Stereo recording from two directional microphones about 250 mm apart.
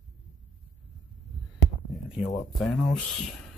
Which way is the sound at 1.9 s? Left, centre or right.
Centre.